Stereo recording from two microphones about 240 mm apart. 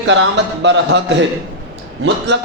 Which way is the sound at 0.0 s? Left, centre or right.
Right.